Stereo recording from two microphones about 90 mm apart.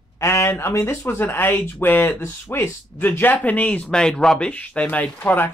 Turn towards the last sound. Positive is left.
turn(degrees=20)  # may be behind; listen again after turning